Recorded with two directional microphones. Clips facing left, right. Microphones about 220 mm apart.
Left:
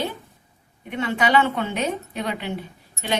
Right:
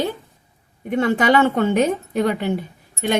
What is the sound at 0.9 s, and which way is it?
Speech, 45° right (ahead or behind).